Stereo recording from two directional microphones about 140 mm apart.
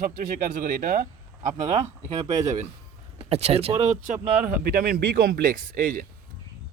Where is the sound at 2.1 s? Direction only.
50° right (ahead or behind).